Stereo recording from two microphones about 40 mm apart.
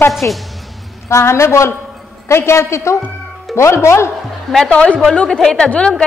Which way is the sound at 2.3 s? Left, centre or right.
Left.